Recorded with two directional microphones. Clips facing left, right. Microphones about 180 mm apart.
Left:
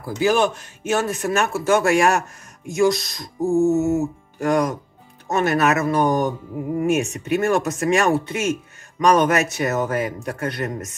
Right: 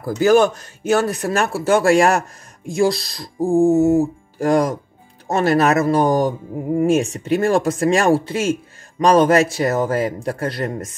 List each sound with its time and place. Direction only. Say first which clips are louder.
0.0 s a man's voice: right 5 dB; 40° right (ahead or behind)